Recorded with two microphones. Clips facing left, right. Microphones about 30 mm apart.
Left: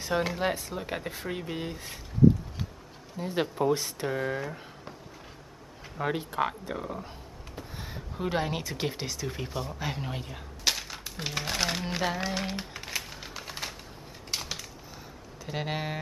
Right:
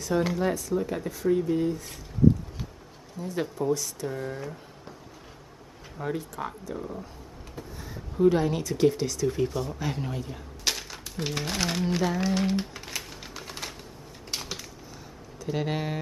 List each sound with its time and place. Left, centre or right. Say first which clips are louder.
0.4 s speech: right 4 dB; left
3.2 s speech: left 1 dB; left
4.4 s a sound: left 2 dB; centre
5.9 s speech: left 3 dB; left
8.2 s speech: right 8 dB; left
10.1 s speech: right 3 dB; left
10.6 s crumpling: left 1 dB; centre
14.3 s typing: even; centre
15.4 s speech: right 3 dB; centre